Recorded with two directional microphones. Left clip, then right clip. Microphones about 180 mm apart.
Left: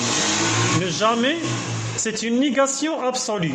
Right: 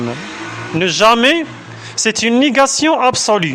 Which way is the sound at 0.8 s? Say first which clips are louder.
Right 10 dB; 50° right (ahead or behind).